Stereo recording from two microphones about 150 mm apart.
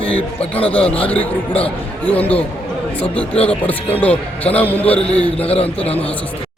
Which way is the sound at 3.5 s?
10° left (ahead or behind).